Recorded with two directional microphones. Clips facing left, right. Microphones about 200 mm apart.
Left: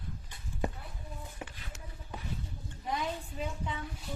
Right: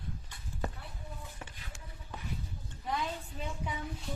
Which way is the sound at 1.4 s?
15° left (ahead or behind).